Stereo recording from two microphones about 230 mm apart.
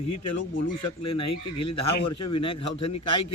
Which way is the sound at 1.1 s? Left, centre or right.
Left.